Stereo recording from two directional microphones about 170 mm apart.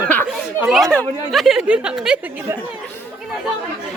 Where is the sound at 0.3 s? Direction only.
Centre (ahead or behind).